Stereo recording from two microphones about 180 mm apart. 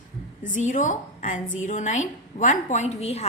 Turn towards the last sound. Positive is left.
turn(degrees=35)  # may be behind; listen again after turning